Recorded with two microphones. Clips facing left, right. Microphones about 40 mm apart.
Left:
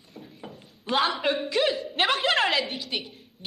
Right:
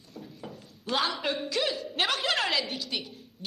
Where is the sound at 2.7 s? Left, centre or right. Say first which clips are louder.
Left 2 dB; centre.